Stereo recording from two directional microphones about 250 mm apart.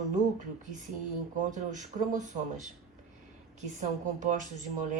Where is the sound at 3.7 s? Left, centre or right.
Right.